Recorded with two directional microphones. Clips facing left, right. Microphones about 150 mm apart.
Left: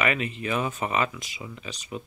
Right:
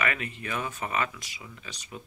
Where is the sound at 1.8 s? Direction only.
85° left.